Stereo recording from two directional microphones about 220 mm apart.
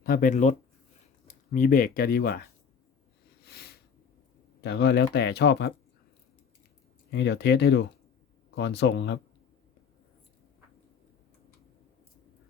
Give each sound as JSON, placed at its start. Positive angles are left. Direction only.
{"t": 0.0, "sound": "speech", "side_deg": 40}
{"t": 3.4, "sound": "sniff", "side_deg": 45}
{"t": 4.6, "sound": "speech", "side_deg": 50}
{"t": 7.1, "sound": "speech", "side_deg": 50}